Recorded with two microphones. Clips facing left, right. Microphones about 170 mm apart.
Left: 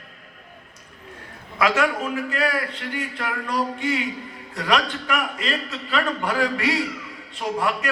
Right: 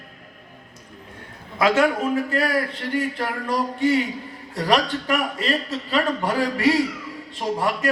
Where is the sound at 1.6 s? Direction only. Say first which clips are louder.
Right 3 dB; 30° right (ahead or behind).